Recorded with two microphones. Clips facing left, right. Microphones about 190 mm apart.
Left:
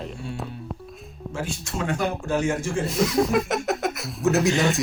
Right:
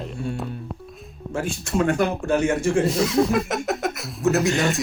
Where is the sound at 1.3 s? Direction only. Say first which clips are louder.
Right 6 dB; 55° right (ahead or behind).